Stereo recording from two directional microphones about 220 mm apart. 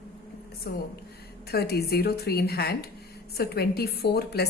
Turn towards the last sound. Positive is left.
turn(degrees=45)  # may be behind; listen again after turning